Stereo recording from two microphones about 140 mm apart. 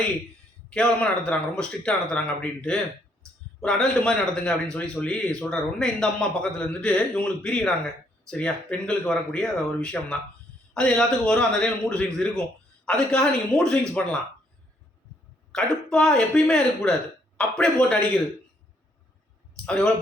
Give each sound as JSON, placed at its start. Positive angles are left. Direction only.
{"t": 0.7, "sound": "a man's voice", "side_deg": 5}
{"t": 15.5, "sound": "a man's voice", "side_deg": 5}
{"t": 19.6, "sound": "speech", "side_deg": 5}